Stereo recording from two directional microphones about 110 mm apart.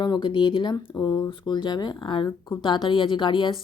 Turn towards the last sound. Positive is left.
turn(degrees=50)  # may be behind; listen again after turning